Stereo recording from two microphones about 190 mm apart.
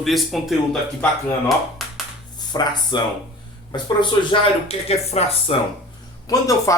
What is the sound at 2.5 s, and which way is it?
Speech, 20° left (ahead or behind).